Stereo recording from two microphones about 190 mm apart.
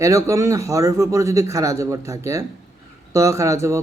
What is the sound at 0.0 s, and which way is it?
Speech, 15° right (ahead or behind).